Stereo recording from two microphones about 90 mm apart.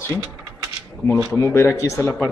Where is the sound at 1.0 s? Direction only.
25° left (ahead or behind).